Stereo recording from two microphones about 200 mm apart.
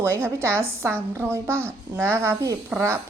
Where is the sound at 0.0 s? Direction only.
10° right (ahead or behind).